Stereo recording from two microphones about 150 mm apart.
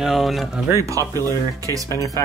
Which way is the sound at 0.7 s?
20° right (ahead or behind).